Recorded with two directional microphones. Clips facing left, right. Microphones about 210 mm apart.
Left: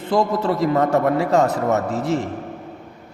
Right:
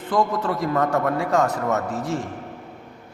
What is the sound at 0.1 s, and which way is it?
A man's voice, 25° left (ahead or behind).